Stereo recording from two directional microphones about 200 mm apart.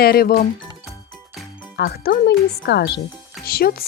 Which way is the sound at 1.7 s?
50° left (ahead or behind).